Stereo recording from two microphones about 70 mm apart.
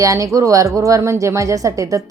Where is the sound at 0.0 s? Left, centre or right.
Right.